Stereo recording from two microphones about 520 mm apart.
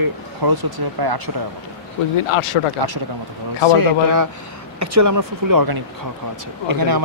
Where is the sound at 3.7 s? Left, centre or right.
Right.